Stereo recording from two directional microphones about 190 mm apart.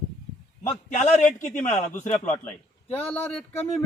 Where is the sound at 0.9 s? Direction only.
40° left (ahead or behind).